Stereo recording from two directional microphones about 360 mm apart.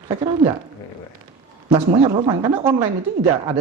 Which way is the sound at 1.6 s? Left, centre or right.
Centre.